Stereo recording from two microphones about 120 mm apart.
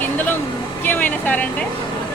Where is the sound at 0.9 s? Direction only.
15° left (ahead or behind).